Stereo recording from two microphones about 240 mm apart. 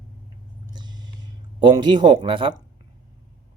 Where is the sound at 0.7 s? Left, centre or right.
Centre.